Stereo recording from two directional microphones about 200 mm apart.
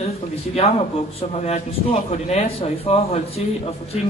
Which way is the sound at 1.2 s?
35° left (ahead or behind).